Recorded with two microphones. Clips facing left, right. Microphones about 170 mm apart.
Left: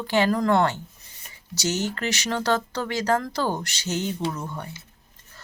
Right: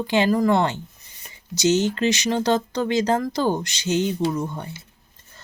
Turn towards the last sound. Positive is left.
turn(degrees=-25)  # may be behind; listen again after turning